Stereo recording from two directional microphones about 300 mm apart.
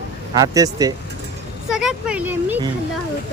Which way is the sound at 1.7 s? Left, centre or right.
Centre.